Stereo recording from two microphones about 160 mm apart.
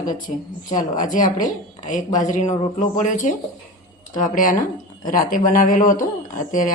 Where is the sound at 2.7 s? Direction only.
55° left (ahead or behind).